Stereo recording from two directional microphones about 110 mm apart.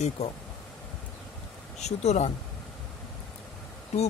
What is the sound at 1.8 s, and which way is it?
Speech, 90° left.